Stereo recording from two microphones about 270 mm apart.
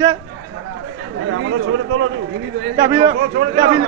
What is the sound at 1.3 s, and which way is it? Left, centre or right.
Speech, right.